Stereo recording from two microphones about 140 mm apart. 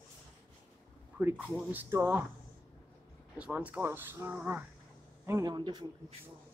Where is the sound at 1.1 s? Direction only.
10° right (ahead or behind).